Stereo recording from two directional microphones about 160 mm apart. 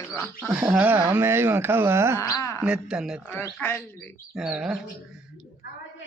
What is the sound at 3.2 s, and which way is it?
Speech, 15° left (ahead or behind).